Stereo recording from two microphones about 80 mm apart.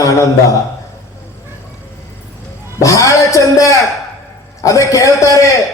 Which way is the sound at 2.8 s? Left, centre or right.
Left.